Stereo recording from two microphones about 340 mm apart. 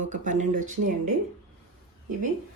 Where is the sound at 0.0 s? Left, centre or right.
Right.